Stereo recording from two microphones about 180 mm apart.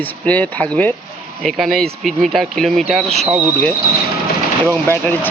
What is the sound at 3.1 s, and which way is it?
Speech, 35° right (ahead or behind).